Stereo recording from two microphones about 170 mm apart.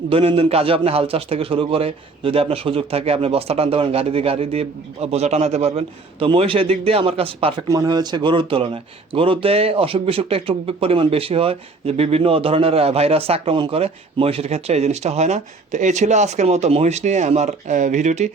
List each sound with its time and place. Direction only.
0.1 s speech: 35° right (ahead or behind)
7.7 s speech: 20° right (ahead or behind); by 18.3 s 45° right (ahead or behind)